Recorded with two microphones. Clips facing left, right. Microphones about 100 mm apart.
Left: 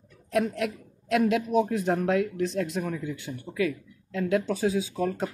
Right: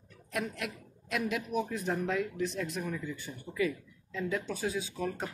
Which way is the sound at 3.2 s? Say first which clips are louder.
Left 4 dB; 75° left (ahead or behind).